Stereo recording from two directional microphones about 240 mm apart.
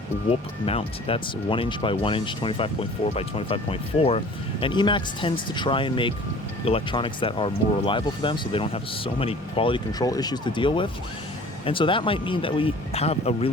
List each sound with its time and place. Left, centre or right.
0.6 s speech: left